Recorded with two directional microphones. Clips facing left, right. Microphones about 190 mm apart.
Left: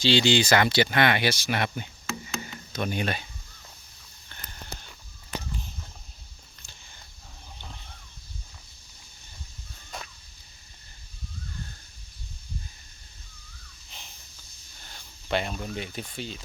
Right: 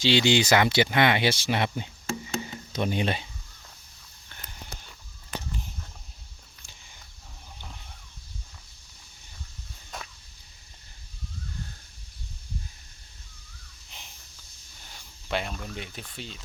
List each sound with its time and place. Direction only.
0.0 s speech: 20° right (ahead or behind)
2.4 s a sound: 25° right (ahead or behind)
14.8 s speech: 10° right (ahead or behind)